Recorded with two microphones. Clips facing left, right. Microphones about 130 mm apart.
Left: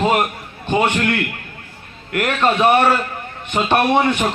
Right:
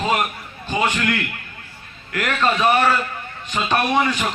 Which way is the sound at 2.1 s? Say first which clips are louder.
Left 3 dB; 25° left (ahead or behind).